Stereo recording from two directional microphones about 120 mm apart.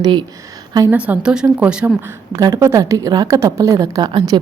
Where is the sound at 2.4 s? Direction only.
30° right (ahead or behind).